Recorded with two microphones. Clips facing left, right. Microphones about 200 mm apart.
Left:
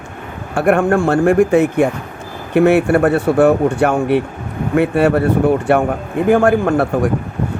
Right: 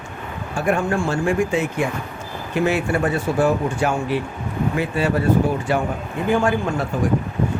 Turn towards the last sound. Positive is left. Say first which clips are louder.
# left 7 dB
turn(degrees=65)  # may be behind; listen again after turning